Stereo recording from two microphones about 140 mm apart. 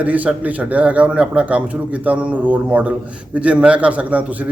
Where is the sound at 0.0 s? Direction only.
10° right (ahead or behind).